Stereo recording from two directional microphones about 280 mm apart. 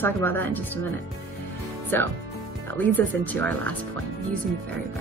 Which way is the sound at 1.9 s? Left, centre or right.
Centre.